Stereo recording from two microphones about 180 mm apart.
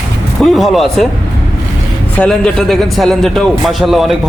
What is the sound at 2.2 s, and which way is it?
A man's voice, 5° left (ahead or behind).